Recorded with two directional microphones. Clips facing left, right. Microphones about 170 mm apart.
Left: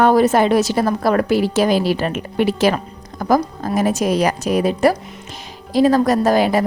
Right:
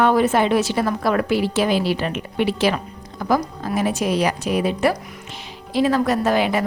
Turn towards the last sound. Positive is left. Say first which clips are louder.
# left 4 dB
turn(degrees=40)  # may be behind; listen again after turning